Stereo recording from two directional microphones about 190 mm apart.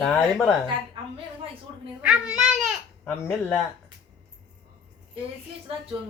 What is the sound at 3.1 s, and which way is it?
Speech, 10° left (ahead or behind).